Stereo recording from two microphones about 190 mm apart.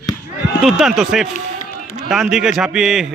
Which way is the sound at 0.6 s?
Centre (ahead or behind).